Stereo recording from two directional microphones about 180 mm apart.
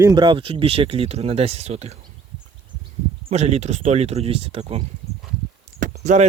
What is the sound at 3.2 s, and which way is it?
Speech, 35° right (ahead or behind).